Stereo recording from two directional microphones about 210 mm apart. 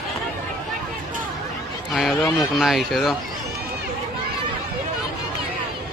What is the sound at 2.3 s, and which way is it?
Speech, centre (ahead or behind).